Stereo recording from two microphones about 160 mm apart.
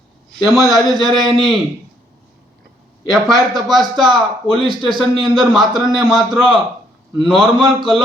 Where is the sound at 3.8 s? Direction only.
30° right (ahead or behind).